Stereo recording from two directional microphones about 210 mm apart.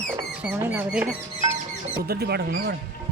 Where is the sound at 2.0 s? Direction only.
50° right (ahead or behind).